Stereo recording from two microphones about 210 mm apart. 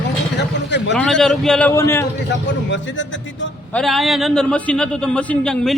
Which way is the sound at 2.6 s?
60° left (ahead or behind).